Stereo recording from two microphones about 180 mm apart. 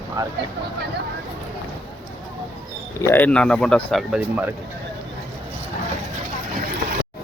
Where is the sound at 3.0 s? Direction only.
10° left (ahead or behind); by 4.5 s 5° right (ahead or behind).